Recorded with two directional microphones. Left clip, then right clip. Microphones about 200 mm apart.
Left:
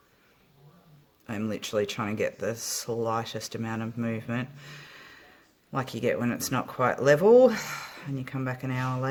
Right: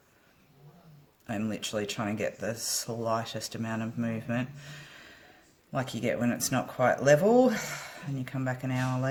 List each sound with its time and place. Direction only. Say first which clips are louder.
1.3 s speech: left 2 dB; 50° left (ahead or behind)